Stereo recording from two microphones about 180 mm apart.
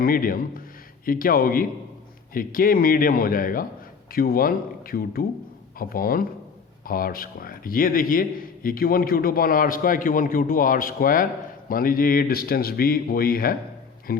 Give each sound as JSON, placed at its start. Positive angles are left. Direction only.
{"t": 0.0, "sound": "a man's voice", "side_deg": 50}